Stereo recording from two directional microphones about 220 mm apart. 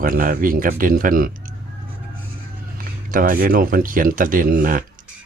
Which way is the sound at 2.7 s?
40° right (ahead or behind).